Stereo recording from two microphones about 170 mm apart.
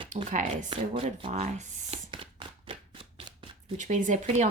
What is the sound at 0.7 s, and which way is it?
Speech, 30° right (ahead or behind).